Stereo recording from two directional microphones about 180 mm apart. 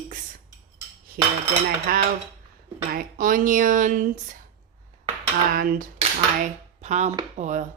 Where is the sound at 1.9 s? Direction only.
55° right (ahead or behind).